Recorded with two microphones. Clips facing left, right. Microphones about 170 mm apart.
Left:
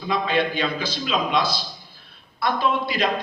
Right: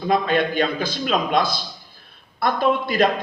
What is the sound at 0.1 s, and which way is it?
Speech, 50° right (ahead or behind).